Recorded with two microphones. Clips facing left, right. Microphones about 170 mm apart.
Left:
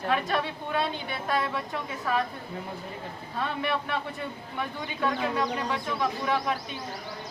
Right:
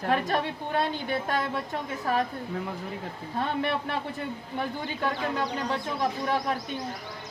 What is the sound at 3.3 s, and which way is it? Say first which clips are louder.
Speech: right 2 dB; 40° right (ahead or behind).